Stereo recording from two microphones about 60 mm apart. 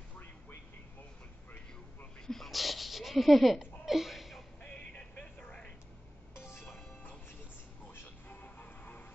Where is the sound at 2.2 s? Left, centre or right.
Centre.